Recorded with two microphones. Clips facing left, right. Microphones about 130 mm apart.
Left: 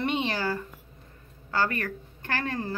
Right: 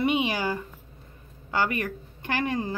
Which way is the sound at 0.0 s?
10° right (ahead or behind).